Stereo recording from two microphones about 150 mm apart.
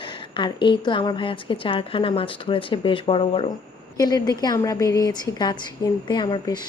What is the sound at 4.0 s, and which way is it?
Speech, 25° left (ahead or behind).